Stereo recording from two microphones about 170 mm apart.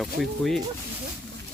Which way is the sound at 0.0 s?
Centre (ahead or behind).